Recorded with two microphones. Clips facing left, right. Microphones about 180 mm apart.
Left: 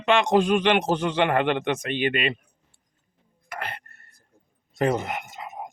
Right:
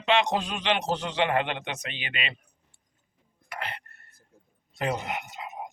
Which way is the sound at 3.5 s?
50° left (ahead or behind).